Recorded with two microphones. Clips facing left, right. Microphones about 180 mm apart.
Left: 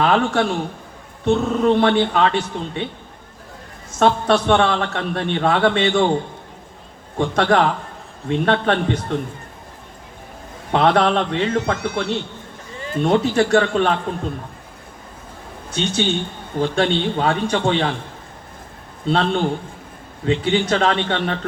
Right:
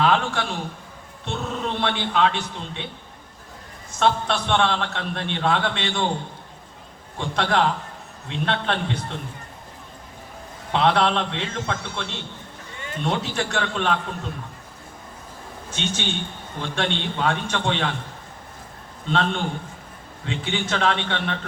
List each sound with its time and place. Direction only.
0.0 s a man's voice: 45° left (ahead or behind)
4.0 s a man's voice: 45° left (ahead or behind)
7.2 s a man's voice: 45° left (ahead or behind)
10.7 s a man's voice: 45° left (ahead or behind); by 12.1 s 65° left (ahead or behind)
12.8 s a sound: 35° left (ahead or behind)
13.1 s a man's voice: 45° left (ahead or behind)
15.7 s a man's voice: 35° left (ahead or behind)
19.0 s a man's voice: 35° left (ahead or behind)